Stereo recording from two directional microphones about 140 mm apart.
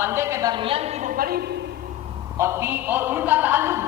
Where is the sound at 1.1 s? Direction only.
90° right.